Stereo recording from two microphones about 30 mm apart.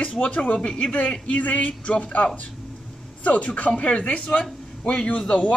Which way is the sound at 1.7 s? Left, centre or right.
Left.